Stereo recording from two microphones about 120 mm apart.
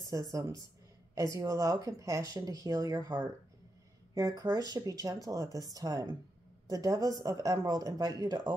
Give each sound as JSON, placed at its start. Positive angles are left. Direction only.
{"t": 0.3, "sound": "speech", "side_deg": -30}